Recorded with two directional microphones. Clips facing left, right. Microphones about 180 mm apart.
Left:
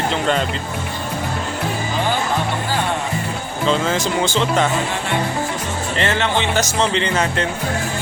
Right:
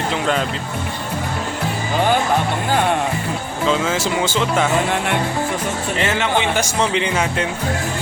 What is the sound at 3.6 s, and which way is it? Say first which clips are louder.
Speech: even; 5° right (ahead or behind).